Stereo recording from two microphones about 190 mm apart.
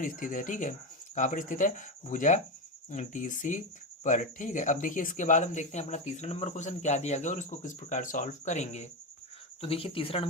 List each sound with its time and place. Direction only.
0.0 s speech: 45° left (ahead or behind)